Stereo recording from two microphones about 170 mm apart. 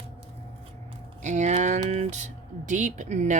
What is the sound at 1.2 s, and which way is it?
Speech, 45° right (ahead or behind).